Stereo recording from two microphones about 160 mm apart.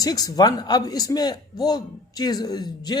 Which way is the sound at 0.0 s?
25° left (ahead or behind).